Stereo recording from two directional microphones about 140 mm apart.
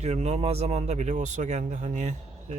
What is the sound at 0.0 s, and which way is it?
Speech, 50° right (ahead or behind).